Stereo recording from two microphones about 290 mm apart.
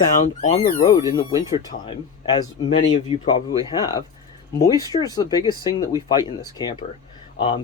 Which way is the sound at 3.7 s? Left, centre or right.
Centre.